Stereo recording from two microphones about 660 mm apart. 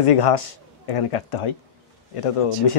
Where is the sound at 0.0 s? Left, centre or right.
Left.